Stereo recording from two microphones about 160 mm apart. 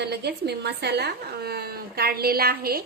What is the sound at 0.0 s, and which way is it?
A woman's voice, 90° right.